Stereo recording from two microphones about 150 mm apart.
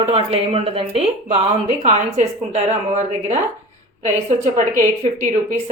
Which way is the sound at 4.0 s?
50° right (ahead or behind).